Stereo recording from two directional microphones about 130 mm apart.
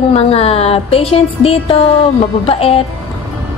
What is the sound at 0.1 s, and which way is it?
A woman's voice, 50° left (ahead or behind).